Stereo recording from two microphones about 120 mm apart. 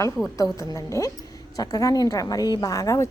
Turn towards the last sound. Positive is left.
turn(degrees=25)  # may be behind; listen again after turning